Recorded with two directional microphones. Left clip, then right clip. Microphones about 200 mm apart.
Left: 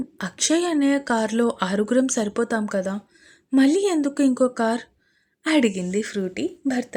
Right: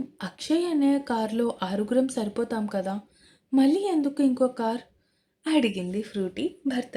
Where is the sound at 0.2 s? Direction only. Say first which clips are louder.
Left 5 dB; 25° left (ahead or behind).